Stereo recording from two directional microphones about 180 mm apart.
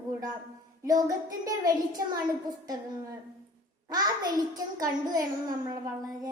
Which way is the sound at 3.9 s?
20° right (ahead or behind).